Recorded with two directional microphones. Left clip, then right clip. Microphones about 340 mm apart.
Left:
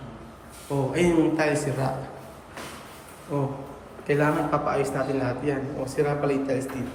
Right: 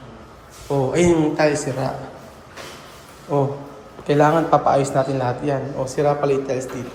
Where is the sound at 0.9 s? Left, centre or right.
Centre.